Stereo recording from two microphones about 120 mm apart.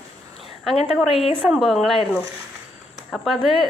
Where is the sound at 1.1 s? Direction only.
55° left (ahead or behind).